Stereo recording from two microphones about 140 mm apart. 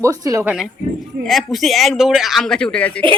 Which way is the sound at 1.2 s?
Centre (ahead or behind).